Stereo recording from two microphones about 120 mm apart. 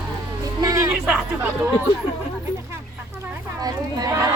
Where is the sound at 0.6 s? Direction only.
25° right (ahead or behind).